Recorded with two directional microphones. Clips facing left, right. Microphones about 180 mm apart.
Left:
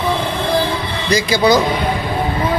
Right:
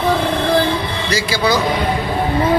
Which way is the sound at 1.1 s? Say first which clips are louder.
Left 5 dB; 15° left (ahead or behind).